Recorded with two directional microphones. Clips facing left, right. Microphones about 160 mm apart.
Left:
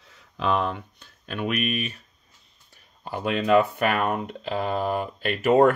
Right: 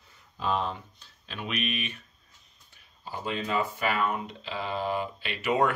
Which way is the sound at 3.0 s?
65° left (ahead or behind).